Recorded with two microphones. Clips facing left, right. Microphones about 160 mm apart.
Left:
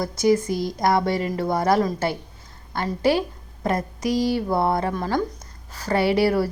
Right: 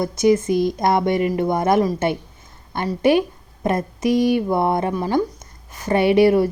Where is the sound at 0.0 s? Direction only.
20° right (ahead or behind).